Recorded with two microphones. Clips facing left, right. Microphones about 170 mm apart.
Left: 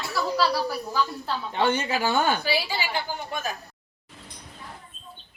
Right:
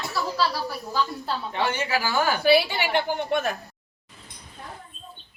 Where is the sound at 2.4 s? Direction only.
60° right (ahead or behind).